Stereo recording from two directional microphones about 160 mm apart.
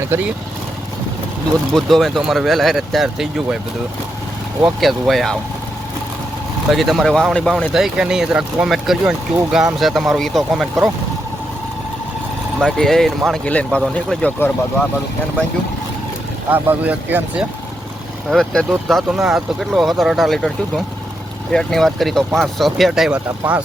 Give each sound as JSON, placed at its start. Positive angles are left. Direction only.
{"t": 0.1, "sound": "speech", "side_deg": -15}
{"t": 1.7, "sound": "speech", "side_deg": 0}
{"t": 4.6, "sound": "speech", "side_deg": 0}
{"t": 6.7, "sound": "speech", "side_deg": 0}
{"t": 12.6, "sound": "speech", "side_deg": 0}
{"t": 16.5, "sound": "speech", "side_deg": -10}